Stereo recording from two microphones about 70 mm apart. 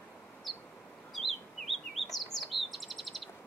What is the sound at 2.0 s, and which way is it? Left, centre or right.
Chirp, centre.